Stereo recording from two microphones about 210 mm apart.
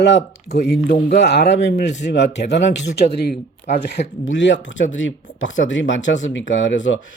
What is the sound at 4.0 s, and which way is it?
Speech, 30° left (ahead or behind).